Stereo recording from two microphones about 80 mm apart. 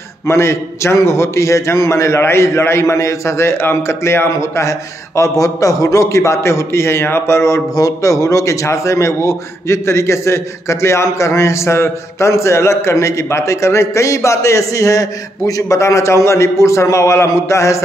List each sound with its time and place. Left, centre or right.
0.3 s a man's voice: left